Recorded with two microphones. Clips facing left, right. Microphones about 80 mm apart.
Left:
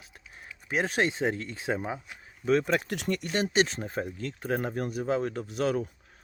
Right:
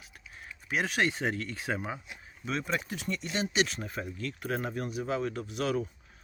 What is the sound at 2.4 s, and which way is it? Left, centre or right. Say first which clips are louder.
Speech: left 8 dB; left.